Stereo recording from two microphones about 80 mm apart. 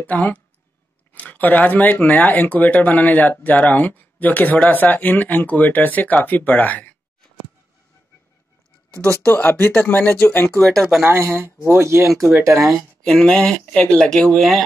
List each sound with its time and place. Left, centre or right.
0.0 s speech: centre
9.0 s speech: centre
10.6 s speech: centre
11.1 s speech: right
12.5 s speech: centre